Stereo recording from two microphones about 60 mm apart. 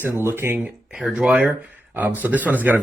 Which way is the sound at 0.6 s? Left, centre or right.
Centre.